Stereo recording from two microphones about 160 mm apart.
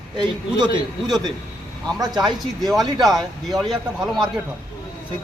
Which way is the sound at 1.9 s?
25° right (ahead or behind).